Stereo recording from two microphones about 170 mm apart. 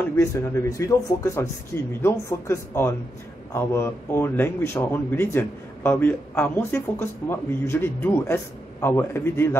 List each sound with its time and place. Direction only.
0.1 s speech: 15° left (ahead or behind)